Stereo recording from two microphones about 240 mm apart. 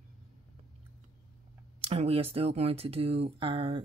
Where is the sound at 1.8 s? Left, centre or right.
Right.